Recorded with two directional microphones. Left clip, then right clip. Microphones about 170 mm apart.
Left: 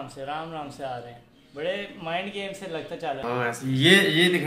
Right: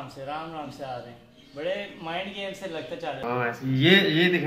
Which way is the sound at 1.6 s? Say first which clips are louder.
Left 1 dB; 60° left (ahead or behind).